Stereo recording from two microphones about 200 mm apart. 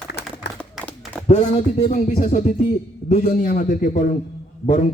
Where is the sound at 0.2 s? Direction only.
55° left (ahead or behind).